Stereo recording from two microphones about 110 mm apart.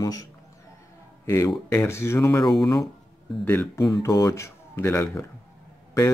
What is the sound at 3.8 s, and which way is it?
Speech, 35° left (ahead or behind).